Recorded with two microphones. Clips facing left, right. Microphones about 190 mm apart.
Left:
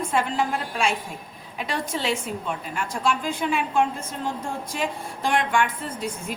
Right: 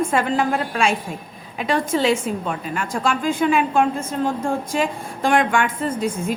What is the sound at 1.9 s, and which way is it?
A woman's voice, 90° right.